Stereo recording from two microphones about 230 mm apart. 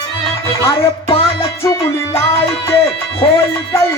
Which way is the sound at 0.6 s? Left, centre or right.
Centre.